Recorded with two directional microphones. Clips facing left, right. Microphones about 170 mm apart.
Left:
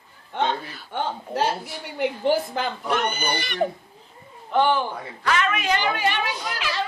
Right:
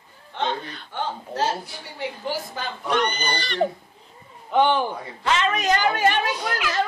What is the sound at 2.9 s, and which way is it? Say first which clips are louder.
Speech: right 4 dB; 5° left (ahead or behind).